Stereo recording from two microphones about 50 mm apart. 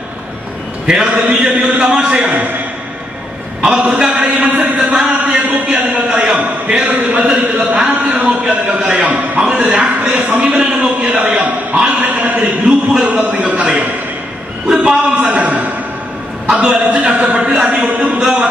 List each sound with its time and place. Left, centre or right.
0.8 s a man's voice: centre
3.6 s a man's voice: centre
4.9 s a sound: centre
8.1 s a man's voice: right
12.4 s a man's voice: right
14.7 s a man's voice: centre